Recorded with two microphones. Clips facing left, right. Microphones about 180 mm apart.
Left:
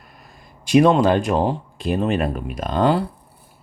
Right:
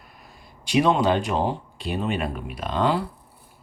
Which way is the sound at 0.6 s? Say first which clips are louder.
Left 6 dB; 50° left (ahead or behind).